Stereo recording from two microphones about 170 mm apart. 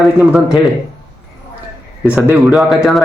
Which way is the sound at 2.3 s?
Centre (ahead or behind).